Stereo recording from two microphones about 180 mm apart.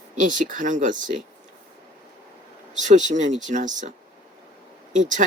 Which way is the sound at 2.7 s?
45° right (ahead or behind).